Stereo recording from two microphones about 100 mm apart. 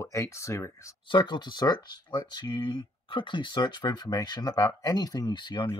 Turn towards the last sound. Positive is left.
turn(degrees=50)  # may be behind; listen again after turning